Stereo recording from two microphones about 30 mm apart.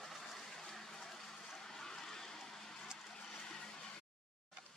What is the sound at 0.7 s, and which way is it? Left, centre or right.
Water, centre.